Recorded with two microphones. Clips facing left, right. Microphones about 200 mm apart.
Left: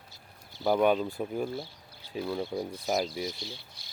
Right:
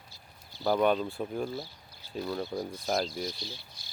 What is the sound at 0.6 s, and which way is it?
Speech, 10° left (ahead or behind).